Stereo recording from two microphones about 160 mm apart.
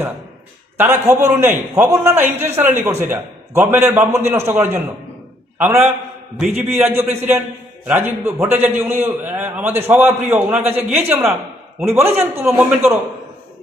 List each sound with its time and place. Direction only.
0.8 s a man's voice: 15° right (ahead or behind)